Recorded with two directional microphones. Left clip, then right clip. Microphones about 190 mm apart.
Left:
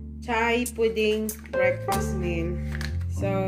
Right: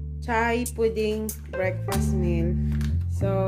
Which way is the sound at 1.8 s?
Centre (ahead or behind).